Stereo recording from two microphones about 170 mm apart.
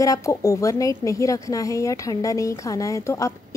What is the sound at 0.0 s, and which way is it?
A woman's voice, 20° left (ahead or behind).